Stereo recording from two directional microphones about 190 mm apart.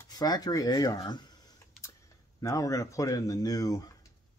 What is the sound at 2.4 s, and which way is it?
Speech, 15° left (ahead or behind).